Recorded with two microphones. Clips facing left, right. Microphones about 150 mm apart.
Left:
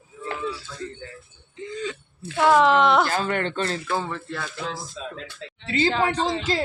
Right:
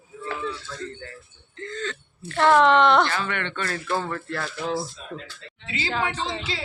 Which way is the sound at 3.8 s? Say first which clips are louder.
Even; 5° left (ahead or behind).